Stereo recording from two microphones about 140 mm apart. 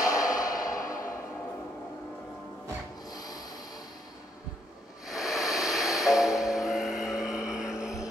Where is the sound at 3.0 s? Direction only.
25° left (ahead or behind).